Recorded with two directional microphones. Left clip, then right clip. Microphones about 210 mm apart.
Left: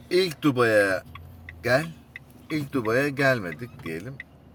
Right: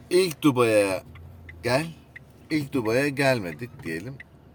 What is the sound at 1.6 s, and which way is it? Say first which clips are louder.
Speech: left 2 dB; centre (ahead or behind).